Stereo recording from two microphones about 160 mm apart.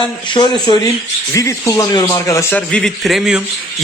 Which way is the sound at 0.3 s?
25° left (ahead or behind).